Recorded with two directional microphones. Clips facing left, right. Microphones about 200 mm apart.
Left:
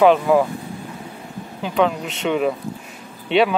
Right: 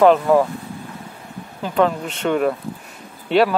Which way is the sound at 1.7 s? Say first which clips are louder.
Right 1 dB; centre (ahead or behind).